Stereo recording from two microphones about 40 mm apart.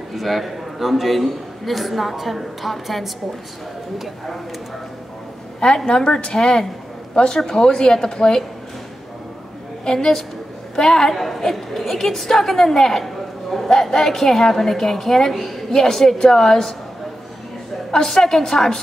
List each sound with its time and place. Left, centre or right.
0.1 s a man's voice: centre
5.9 s a woman's voice: centre
9.8 s a woman's voice: centre
18.0 s a woman's voice: centre